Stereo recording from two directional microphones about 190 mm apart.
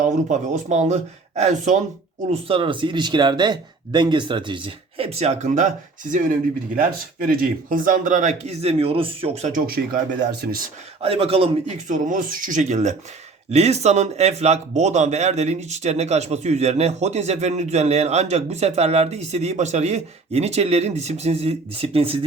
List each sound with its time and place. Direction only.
0.0 s speech: 40° right (ahead or behind)
2.3 s speech: 30° right (ahead or behind); by 10.0 s 50° right (ahead or behind)
11.0 s speech: 30° right (ahead or behind)